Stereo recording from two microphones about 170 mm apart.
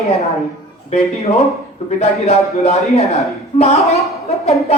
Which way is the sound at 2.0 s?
40° left (ahead or behind).